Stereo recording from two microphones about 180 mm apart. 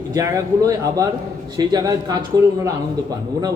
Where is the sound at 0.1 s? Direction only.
20° right (ahead or behind).